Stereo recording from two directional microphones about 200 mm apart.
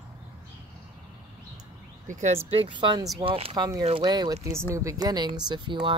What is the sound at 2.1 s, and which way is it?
Speech, 35° right (ahead or behind).